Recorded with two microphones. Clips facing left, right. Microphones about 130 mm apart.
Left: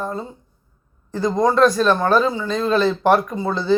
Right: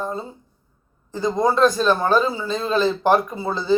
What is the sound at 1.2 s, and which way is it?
Speech, centre (ahead or behind).